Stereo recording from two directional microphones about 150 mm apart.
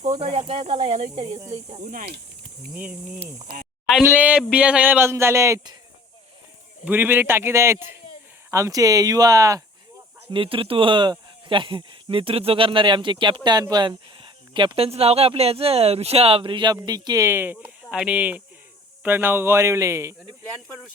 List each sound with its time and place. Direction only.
0.2 s speech: 45° right (ahead or behind)
1.8 s speech: 70° right (ahead or behind)
2.7 s speech: 10° right (ahead or behind)
3.5 s speech: 80° right
4.0 s speech: 10° right (ahead or behind)
6.8 s speech: 15° right (ahead or behind)
10.3 s speech: 35° right (ahead or behind)
17.2 s speech: 15° right (ahead or behind)